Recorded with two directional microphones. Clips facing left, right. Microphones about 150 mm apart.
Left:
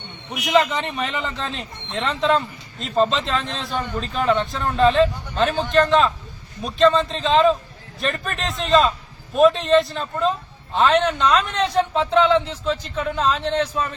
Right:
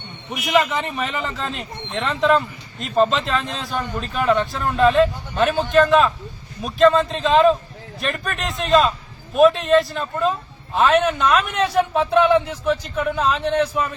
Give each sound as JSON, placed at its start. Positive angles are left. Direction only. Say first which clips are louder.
{"t": 0.4, "sound": "a man's voice", "louder": "even", "side_deg": -5}